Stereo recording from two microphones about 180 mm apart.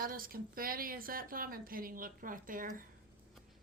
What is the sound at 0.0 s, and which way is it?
A woman's voice, 50° right (ahead or behind).